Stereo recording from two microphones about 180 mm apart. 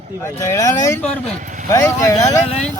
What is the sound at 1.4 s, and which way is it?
Speech, 45° right (ahead or behind).